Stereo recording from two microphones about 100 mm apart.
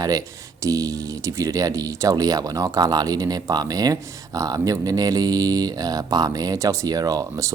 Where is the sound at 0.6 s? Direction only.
35° right (ahead or behind).